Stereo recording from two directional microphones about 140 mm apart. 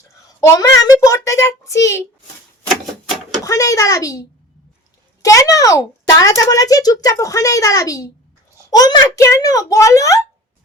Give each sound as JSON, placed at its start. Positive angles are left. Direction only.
{"t": 0.4, "sound": "a child's voice", "side_deg": 20}
{"t": 3.4, "sound": "a child's voice", "side_deg": 25}
{"t": 5.2, "sound": "a child's voice", "side_deg": 25}